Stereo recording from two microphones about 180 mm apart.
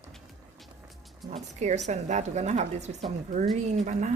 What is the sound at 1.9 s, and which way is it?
Speech, 40° right (ahead or behind).